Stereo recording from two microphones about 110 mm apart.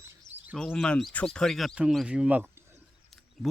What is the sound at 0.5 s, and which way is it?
Speech, 5° left (ahead or behind).